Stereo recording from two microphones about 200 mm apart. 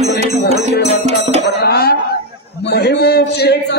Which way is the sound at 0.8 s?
35° right (ahead or behind).